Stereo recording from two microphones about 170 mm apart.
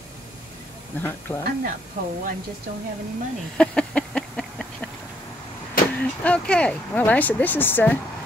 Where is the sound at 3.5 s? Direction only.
5° left (ahead or behind).